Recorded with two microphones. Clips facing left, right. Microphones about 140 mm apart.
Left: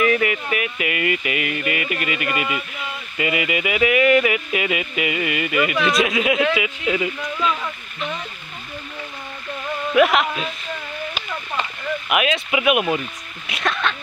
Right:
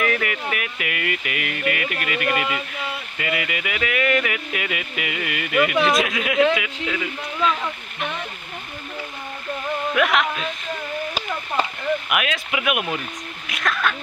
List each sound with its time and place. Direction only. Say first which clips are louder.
0.0 s music: left 4 dB; 5° left (ahead or behind)
3.2 s speech: left 5 dB; 10° left (ahead or behind)
5.9 s music: left 2 dB; centre (ahead or behind)
9.9 s music: left 6 dB; 5° left (ahead or behind)
12.1 s music: left 4 dB; 5° left (ahead or behind)